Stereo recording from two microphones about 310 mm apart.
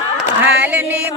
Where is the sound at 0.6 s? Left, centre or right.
Centre.